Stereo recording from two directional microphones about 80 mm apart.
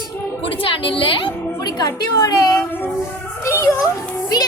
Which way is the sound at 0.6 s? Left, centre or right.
Left.